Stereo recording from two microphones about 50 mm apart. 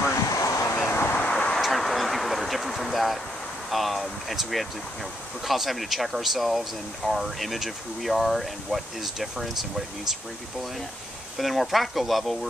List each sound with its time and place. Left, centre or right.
0.3 s a sound: left
0.8 s vehicle: left
1.2 s vehicle: left
1.6 s a sound: centre
3.7 s speech: centre
11.3 s speech: centre